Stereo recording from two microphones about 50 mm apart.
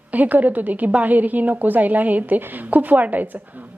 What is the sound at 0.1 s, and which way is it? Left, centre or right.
A woman's voice, right.